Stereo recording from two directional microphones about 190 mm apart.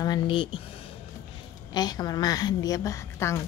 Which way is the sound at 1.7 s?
20° left (ahead or behind).